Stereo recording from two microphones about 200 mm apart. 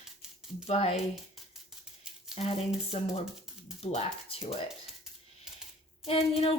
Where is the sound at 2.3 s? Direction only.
30° left (ahead or behind).